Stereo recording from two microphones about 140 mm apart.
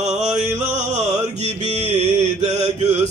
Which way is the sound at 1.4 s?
50° right (ahead or behind).